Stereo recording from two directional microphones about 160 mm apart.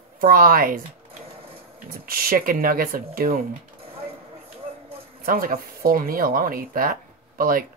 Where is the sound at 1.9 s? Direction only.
65° right (ahead or behind).